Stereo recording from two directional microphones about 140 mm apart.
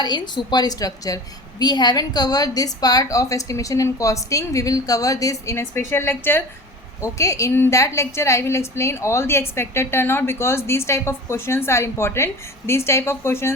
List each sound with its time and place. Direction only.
0.0 s a woman's voice: 30° left (ahead or behind)